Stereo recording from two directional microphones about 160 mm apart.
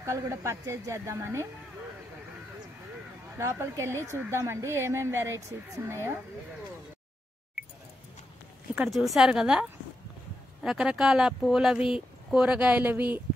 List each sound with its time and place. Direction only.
0.0 s a woman's voice: 15° right (ahead or behind)
3.3 s a woman's voice: 20° right (ahead or behind)
8.7 s speech: centre (ahead or behind)